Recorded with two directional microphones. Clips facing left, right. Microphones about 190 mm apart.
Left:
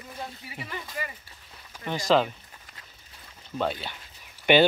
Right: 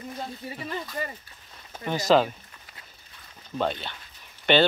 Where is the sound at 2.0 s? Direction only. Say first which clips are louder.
Right 2 dB; 40° right (ahead or behind).